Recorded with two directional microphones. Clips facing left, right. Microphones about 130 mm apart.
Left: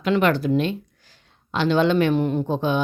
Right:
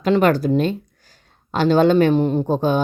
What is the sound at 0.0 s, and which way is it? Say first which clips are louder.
A woman's voice: right 4 dB; 40° right (ahead or behind).